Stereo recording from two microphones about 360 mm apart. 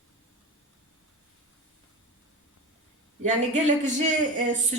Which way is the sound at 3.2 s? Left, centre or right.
Centre.